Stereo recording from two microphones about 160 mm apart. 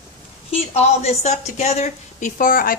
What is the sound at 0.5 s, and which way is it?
A woman's voice, 40° left (ahead or behind).